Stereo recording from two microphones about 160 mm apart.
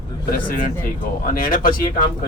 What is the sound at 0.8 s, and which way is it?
Speech, 60° left (ahead or behind).